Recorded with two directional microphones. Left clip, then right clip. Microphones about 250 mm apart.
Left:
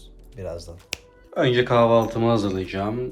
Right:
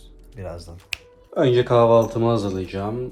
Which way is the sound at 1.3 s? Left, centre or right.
Right.